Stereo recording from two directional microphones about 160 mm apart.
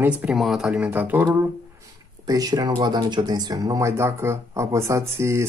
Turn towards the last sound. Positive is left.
turn(degrees=-15)  # may be behind; listen again after turning